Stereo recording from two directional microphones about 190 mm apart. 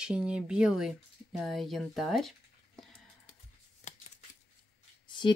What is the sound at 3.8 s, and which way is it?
Shuffling cards, 35° left (ahead or behind).